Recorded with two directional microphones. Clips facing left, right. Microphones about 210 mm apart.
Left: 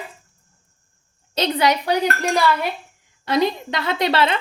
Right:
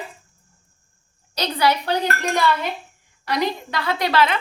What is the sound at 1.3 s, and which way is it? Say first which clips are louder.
Speech: left 2 dB; 25° left (ahead or behind).